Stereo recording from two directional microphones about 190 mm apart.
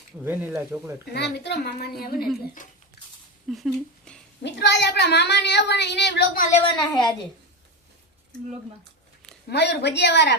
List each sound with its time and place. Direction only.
0.3 s speech: 10° right (ahead or behind)
1.1 s speech: 60° left (ahead or behind)
3.5 s speech: centre (ahead or behind)
4.4 s speech: 65° left (ahead or behind)
6.7 s a woman's voice: 20° left (ahead or behind)
9.5 s speech: 65° left (ahead or behind)